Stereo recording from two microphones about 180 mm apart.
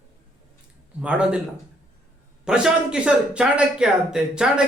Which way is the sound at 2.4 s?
5° right (ahead or behind).